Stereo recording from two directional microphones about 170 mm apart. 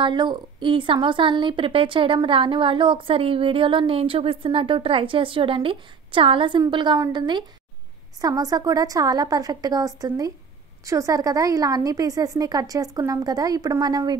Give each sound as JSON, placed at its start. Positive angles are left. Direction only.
{"t": 0.0, "sound": "a woman's voice", "side_deg": -25}